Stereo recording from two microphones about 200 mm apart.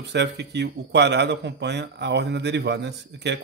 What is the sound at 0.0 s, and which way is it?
Speech, 60° right (ahead or behind).